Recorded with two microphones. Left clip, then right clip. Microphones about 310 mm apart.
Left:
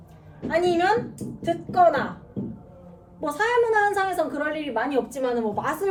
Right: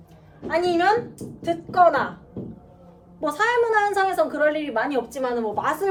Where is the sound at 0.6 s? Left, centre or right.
Centre.